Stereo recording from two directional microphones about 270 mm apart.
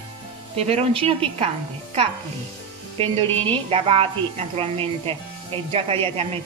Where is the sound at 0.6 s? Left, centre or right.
Right.